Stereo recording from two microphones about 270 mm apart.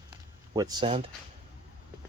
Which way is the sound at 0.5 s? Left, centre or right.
Centre.